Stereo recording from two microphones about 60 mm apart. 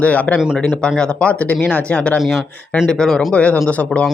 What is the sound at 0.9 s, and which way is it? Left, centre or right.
Speech, centre.